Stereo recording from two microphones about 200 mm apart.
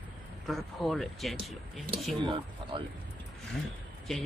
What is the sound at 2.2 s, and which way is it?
Speech, 25° right (ahead or behind).